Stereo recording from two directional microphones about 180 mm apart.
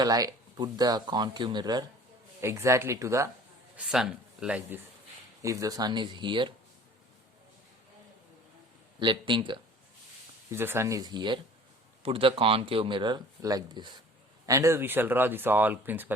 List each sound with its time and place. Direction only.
0.0 s speech: 20° right (ahead or behind)
3.8 s speech: 5° right (ahead or behind)
5.4 s speech: 15° right (ahead or behind)
9.0 s speech: 25° right (ahead or behind)
10.5 s speech: 15° right (ahead or behind)